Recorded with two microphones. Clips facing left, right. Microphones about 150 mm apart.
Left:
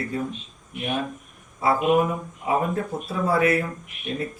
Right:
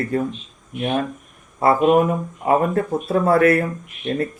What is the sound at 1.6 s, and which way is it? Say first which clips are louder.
Speech: right 5 dB; 55° right (ahead or behind).